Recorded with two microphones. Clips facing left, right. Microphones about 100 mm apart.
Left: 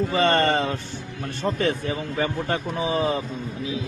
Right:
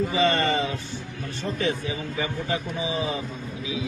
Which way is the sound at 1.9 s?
55° left (ahead or behind).